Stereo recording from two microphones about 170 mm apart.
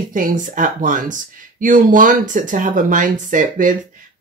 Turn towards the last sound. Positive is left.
turn(degrees=-50)  # may be behind; listen again after turning